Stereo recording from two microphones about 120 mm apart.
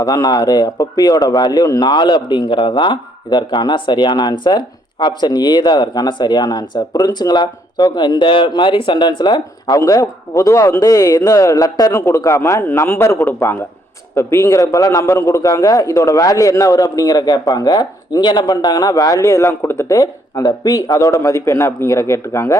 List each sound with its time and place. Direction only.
0.0 s a man's voice: 30° left (ahead or behind)